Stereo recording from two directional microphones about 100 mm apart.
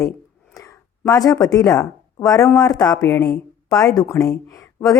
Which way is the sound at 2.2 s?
35° left (ahead or behind).